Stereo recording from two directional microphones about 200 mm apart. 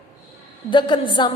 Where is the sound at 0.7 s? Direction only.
25° left (ahead or behind).